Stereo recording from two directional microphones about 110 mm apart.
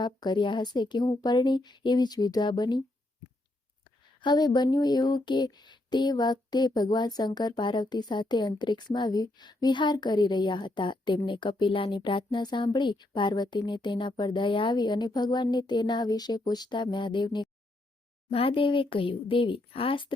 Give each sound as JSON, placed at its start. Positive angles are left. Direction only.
{"t": 0.0, "sound": "speech", "side_deg": 45}
{"t": 4.2, "sound": "speech", "side_deg": 40}
{"t": 18.3, "sound": "speech", "side_deg": 55}